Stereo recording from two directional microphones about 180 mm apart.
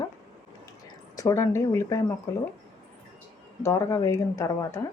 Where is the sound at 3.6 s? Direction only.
15° left (ahead or behind).